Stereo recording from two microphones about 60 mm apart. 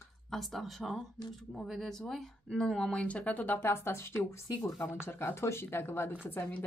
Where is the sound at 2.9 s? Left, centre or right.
Left.